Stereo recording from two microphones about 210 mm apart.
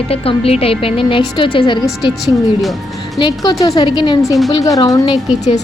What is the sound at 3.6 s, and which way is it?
A woman's voice, 20° left (ahead or behind).